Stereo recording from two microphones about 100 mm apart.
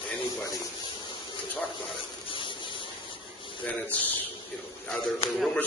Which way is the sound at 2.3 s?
55° left (ahead or behind).